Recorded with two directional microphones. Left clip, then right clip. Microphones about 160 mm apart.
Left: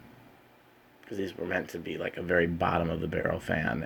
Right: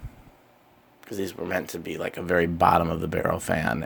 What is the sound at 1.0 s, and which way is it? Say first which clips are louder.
Speech: right 3 dB; 40° right (ahead or behind).